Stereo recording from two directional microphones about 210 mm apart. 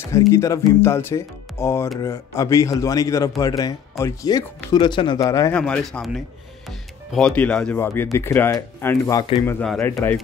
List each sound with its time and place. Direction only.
0.3 s speech: 15° left (ahead or behind)
5.6 s speech: 5° left (ahead or behind)
9.6 s speech: 5° left (ahead or behind)